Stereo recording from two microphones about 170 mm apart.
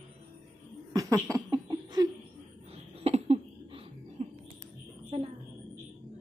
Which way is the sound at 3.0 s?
35° right (ahead or behind).